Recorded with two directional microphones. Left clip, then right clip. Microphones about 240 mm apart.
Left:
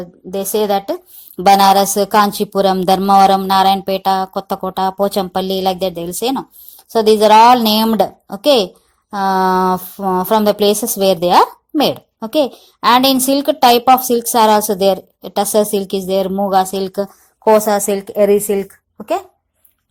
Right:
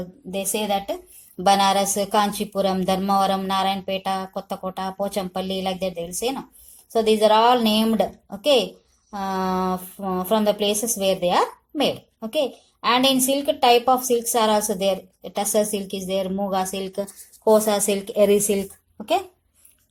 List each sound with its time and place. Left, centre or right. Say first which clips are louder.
0.3 s a woman's voice: left 8 dB; left; by 19.2 s centre